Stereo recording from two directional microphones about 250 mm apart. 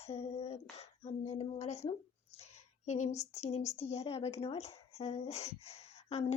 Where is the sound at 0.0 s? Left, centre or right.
Left.